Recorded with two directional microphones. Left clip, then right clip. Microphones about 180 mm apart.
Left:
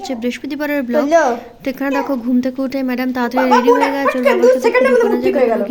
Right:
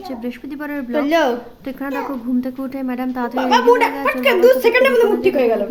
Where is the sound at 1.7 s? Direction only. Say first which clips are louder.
Left 6 dB; 20° left (ahead or behind).